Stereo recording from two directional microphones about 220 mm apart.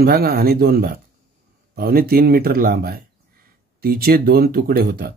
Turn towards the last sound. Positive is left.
turn(degrees=-45)  # may be behind; listen again after turning